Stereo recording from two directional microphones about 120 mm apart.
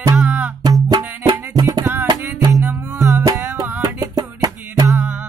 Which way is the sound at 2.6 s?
20° right (ahead or behind).